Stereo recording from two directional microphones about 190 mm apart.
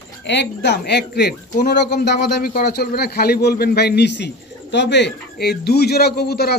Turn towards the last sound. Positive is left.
turn(degrees=55)  # may be behind; listen again after turning